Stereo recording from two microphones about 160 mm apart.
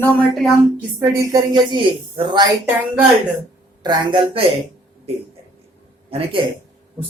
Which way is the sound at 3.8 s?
30° right (ahead or behind).